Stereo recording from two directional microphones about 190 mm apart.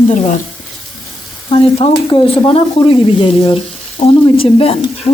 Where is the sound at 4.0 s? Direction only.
25° left (ahead or behind).